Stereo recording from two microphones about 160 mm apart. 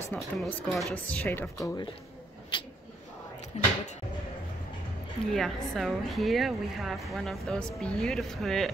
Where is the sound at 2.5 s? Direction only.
30° left (ahead or behind).